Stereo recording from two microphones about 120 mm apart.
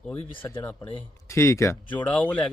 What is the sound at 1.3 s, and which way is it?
Speech, 25° left (ahead or behind).